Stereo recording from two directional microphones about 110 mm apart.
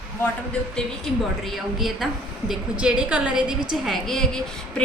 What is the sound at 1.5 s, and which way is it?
A woman's voice, centre (ahead or behind).